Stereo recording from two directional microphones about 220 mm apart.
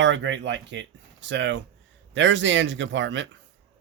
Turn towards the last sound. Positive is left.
turn(degrees=-55)  # may be behind; listen again after turning